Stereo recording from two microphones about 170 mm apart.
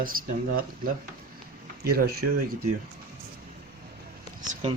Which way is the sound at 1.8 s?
65° right (ahead or behind).